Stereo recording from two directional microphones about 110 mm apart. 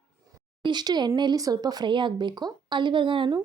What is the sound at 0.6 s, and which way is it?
Speech, 40° right (ahead or behind).